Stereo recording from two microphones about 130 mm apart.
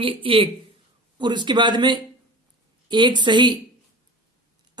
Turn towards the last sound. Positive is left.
turn(degrees=-35)  # may be behind; listen again after turning